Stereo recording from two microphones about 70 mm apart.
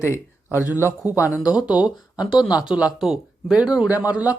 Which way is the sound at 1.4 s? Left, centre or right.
Left.